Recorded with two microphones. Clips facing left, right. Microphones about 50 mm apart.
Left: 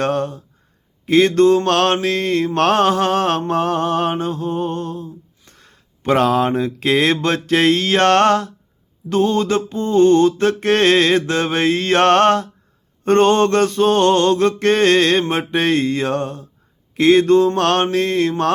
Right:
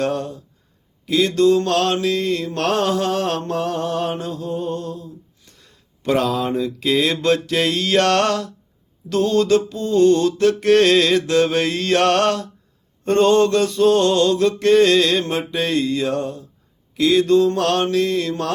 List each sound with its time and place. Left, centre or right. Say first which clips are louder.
0.0 s mantra: left 3 dB; left
5.0 s speech: left 3 dB; left
9.0 s mantra: even; left